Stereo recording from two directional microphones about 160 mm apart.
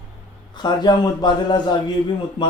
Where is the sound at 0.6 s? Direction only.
25° left (ahead or behind).